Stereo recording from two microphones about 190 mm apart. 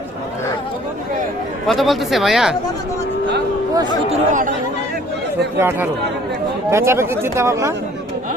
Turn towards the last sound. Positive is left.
turn(degrees=-15)  # may be behind; listen again after turning